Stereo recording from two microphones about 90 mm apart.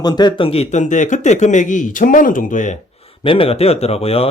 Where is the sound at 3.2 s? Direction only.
85° left.